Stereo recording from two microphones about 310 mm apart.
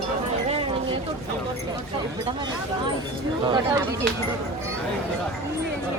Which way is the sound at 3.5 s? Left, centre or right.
Centre.